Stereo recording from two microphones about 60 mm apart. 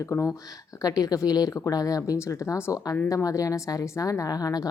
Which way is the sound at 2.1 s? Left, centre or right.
Left.